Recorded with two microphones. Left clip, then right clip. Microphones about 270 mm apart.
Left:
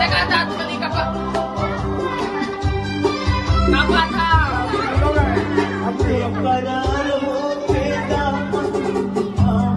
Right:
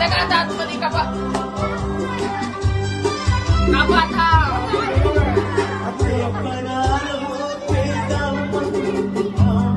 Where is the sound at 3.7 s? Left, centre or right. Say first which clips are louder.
Right 1 dB; centre.